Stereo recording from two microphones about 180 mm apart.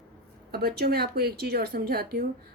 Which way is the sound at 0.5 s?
60° right (ahead or behind).